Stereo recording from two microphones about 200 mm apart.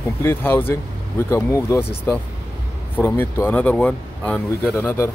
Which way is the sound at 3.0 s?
10° left (ahead or behind).